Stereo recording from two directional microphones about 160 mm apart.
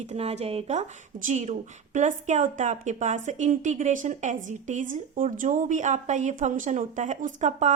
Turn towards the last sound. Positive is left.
turn(degrees=-50)  # may be behind; listen again after turning